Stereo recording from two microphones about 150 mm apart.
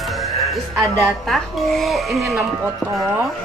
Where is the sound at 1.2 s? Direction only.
Centre (ahead or behind).